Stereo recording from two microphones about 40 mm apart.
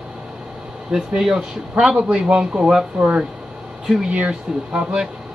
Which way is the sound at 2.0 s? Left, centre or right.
Right.